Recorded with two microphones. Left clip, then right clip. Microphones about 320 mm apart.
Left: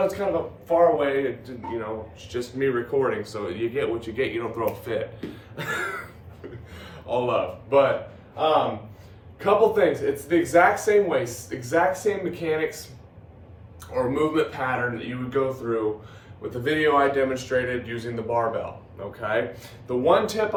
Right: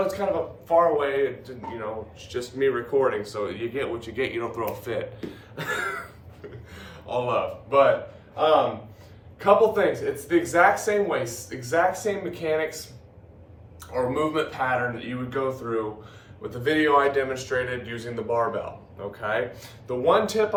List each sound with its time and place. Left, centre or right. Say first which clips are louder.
0.7 s a man's voice: left 1 dB; centre
9.4 s a man's voice: even; centre
13.9 s a man's voice: left 1 dB; centre